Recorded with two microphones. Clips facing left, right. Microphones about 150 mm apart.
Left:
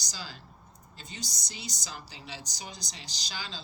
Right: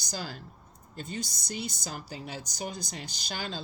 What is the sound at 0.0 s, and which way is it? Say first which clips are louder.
Speech: right 6 dB; 55° right (ahead or behind).